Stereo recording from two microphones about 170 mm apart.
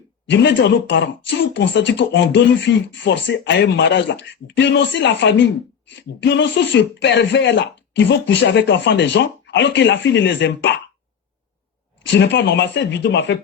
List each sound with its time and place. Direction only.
0.3 s speech: 90° left
12.1 s speech: 90° left